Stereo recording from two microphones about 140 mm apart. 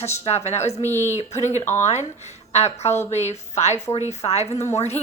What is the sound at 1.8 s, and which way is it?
A woman's voice, 55° left (ahead or behind).